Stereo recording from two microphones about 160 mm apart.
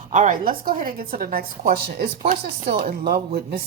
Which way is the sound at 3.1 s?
70° right (ahead or behind).